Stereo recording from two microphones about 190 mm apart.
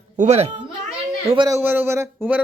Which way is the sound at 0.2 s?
35° right (ahead or behind).